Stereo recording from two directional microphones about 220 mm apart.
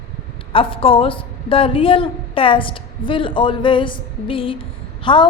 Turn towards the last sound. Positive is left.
turn(degrees=20)  # may be behind; listen again after turning